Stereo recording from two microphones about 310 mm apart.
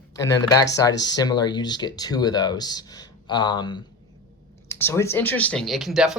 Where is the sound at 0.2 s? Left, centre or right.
Centre.